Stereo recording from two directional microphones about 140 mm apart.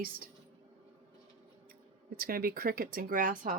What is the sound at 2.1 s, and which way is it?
Speech, 90° right.